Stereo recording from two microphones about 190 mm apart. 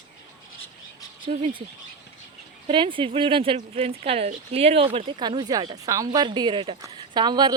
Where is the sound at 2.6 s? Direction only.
25° right (ahead or behind).